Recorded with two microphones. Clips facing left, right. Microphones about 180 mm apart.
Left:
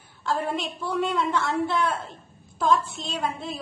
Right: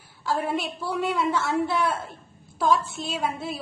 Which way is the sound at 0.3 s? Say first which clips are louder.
Right 1 dB; 5° right (ahead or behind).